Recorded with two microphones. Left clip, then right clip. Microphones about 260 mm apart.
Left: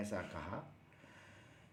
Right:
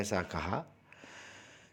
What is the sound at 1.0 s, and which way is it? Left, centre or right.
Sniff, right.